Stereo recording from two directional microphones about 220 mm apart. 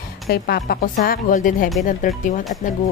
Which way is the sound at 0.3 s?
45° left (ahead or behind).